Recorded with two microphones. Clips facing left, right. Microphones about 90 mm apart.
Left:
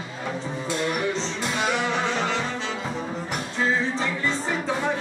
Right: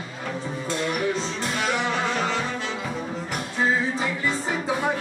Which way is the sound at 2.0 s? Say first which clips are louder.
Even; 10° right (ahead or behind).